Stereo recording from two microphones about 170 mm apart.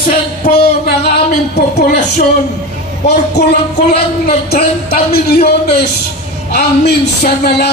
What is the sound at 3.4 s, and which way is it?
Music, 80° left.